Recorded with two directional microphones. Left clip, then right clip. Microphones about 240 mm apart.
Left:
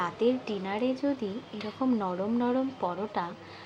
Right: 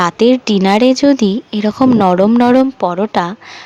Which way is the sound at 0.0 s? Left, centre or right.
Right.